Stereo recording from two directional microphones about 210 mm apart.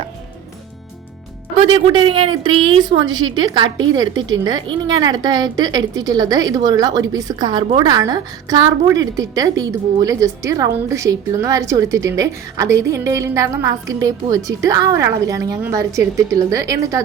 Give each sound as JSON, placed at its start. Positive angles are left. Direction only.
{"t": 1.7, "sound": "a woman's voice", "side_deg": -25}